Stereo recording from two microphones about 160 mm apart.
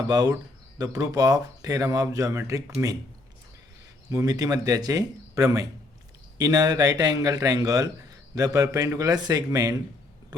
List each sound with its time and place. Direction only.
0.1 s speech: 25° right (ahead or behind)
4.1 s speech: 20° right (ahead or behind)